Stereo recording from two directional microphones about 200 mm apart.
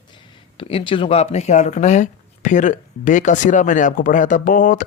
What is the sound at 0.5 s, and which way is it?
Speech, 25° left (ahead or behind).